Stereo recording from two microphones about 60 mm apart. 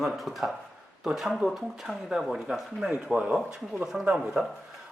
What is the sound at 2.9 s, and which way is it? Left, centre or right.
Speech, right.